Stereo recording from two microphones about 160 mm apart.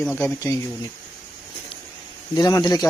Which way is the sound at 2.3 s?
25° left (ahead or behind).